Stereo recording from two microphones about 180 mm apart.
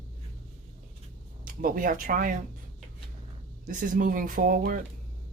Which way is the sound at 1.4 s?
50° right (ahead or behind).